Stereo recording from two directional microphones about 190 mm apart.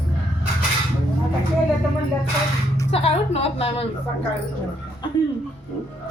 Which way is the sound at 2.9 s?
30° left (ahead or behind).